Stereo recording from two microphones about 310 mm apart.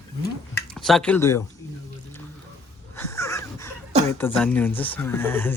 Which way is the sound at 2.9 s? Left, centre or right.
Centre.